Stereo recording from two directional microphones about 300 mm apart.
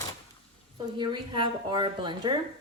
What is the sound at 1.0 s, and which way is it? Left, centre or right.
Speech, centre.